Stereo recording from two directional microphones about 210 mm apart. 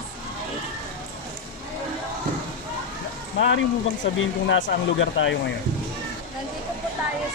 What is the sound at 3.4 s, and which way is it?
Speech, 65° left (ahead or behind).